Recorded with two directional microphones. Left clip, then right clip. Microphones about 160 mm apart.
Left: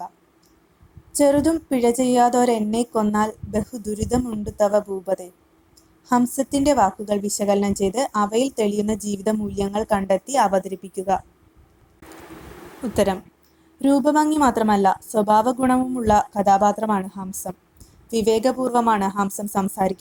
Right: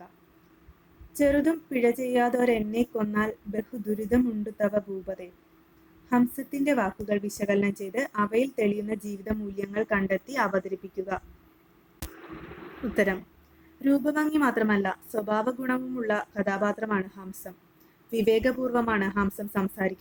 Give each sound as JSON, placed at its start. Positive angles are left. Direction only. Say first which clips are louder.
{"t": 1.1, "sound": "a woman's voice", "louder": "left 6 dB", "side_deg": 30}
{"t": 13.8, "sound": "a woman's voice", "louder": "left 8 dB", "side_deg": 25}